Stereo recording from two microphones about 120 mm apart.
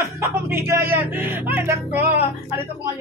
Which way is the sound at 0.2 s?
20° right (ahead or behind).